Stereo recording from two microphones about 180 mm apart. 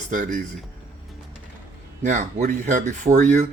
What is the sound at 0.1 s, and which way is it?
Speech, 45° right (ahead or behind).